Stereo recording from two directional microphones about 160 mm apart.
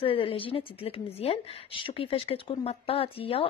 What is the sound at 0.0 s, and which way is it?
A woman's voice, 35° left (ahead or behind).